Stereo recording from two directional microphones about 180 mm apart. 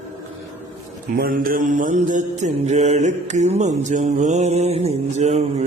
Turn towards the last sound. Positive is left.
turn(degrees=-35)  # may be behind; listen again after turning